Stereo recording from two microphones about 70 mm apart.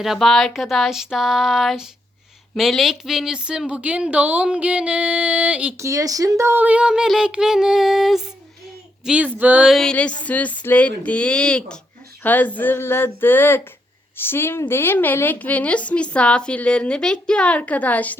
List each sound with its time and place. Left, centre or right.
0.0 s a sound: centre
2.6 s a woman's voice: centre
5.8 s speech: right
6.6 s a woman's voice: centre
9.1 s a sound: right
9.8 s a woman's voice: centre
12.2 s a woman's voice: left